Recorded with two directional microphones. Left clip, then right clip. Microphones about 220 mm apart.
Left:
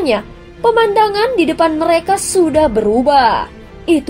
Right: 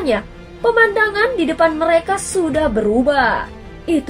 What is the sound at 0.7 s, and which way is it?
A woman's voice, 30° left (ahead or behind).